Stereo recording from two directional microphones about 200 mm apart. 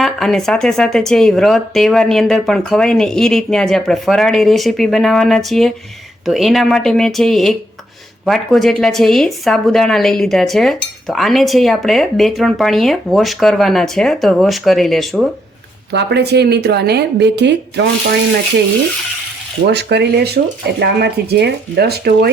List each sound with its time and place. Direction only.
0.0 s speech: centre (ahead or behind)
15.9 s speech: 55° right (ahead or behind)
19.6 s speech: 55° right (ahead or behind)